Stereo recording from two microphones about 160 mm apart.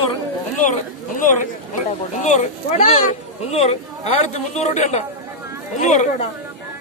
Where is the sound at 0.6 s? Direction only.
55° left (ahead or behind).